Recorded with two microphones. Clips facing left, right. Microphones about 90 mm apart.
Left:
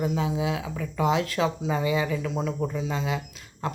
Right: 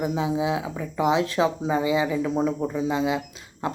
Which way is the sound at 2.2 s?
30° right (ahead or behind).